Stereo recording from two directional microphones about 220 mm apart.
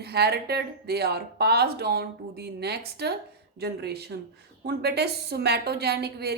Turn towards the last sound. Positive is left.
turn(degrees=-45)  # may be behind; listen again after turning